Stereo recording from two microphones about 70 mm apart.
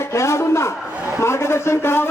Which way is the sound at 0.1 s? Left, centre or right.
Left.